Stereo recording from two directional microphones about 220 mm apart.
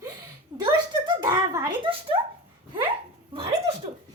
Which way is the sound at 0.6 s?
20° right (ahead or behind).